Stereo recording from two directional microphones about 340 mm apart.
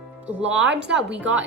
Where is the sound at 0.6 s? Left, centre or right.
Right.